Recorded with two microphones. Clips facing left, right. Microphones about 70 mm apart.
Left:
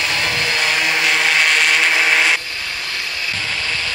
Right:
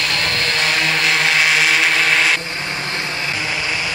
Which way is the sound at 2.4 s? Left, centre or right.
Right.